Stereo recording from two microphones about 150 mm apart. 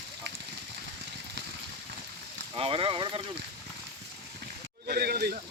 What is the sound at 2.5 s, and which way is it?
Speech, 35° right (ahead or behind).